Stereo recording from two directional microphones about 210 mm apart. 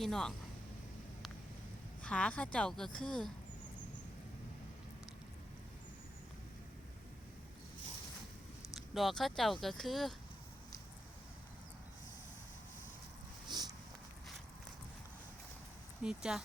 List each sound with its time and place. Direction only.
0.0 s speech: centre (ahead or behind)
2.0 s speech: 5° left (ahead or behind)
8.7 s speech: centre (ahead or behind)
13.5 s a sound: 20° right (ahead or behind)
16.0 s speech: centre (ahead or behind)